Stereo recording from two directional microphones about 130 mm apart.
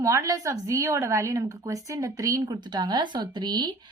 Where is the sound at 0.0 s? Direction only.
25° right (ahead or behind).